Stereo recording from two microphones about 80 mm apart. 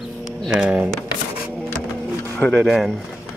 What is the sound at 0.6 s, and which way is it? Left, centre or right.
Speech, centre.